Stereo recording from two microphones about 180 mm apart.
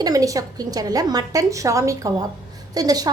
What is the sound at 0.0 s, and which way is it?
A woman's voice, 20° right (ahead or behind).